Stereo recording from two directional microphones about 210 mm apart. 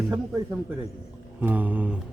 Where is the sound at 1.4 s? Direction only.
10° right (ahead or behind).